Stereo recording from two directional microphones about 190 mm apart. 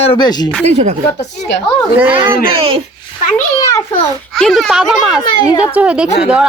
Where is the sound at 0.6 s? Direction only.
35° right (ahead or behind).